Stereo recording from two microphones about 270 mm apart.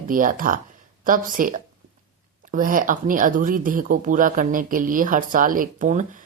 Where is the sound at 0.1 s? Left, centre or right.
Right.